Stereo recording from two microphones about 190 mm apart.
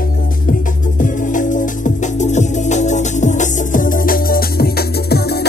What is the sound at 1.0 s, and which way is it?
Music, 45° left (ahead or behind).